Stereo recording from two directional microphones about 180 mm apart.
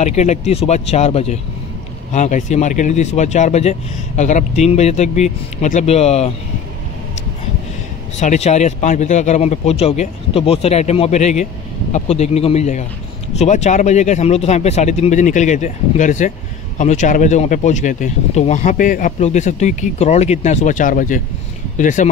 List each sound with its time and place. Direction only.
0.0 s speech: 40° left (ahead or behind)
8.2 s speech: 40° left (ahead or behind)